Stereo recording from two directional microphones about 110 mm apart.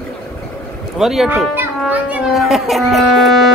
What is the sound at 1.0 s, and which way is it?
Music, centre (ahead or behind).